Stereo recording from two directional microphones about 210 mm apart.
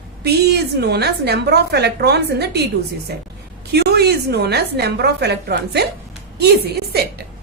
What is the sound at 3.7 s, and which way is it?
A woman's voice, 50° right (ahead or behind).